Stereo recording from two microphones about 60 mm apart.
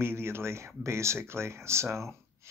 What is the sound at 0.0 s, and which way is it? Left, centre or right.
Speech, right.